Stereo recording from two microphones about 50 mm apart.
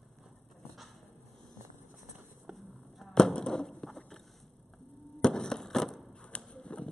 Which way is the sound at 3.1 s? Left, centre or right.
Centre.